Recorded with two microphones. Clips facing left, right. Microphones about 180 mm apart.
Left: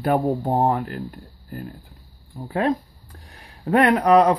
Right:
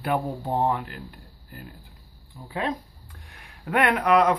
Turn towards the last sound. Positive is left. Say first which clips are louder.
# left 5 dB
turn(degrees=35)  # may be behind; listen again after turning